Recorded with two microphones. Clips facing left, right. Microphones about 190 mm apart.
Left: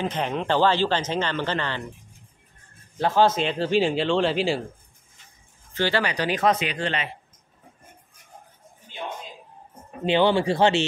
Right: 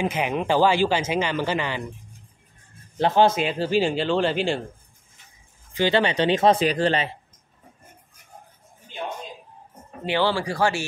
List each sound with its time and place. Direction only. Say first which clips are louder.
0.0 s speech: right 2 dB; 10° right (ahead or behind)
3.0 s speech: right 1 dB; 15° right (ahead or behind); by 4.6 s centre (ahead or behind)
5.7 s speech: right 3 dB; 15° right (ahead or behind); by 7.1 s 35° right (ahead or behind)
10.0 s speech: left 4 dB; 20° left (ahead or behind)